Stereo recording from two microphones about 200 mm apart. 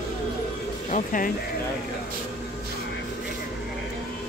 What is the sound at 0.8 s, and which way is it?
Speech, 40° left (ahead or behind).